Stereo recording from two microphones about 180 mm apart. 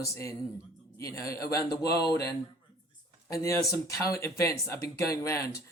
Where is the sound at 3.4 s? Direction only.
20° left (ahead or behind).